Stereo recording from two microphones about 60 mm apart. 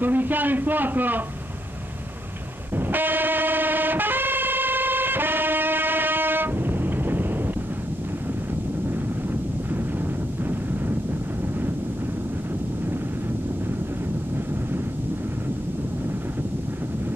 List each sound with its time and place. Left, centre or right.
0.0 s a man's voice: right
2.7 s vehicle: right